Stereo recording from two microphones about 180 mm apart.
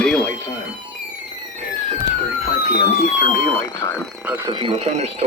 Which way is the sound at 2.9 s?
45° left (ahead or behind).